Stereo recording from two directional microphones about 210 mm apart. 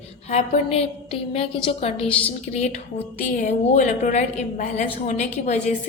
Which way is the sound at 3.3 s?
35° left (ahead or behind).